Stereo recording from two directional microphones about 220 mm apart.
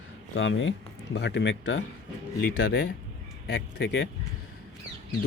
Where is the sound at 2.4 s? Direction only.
45° left (ahead or behind).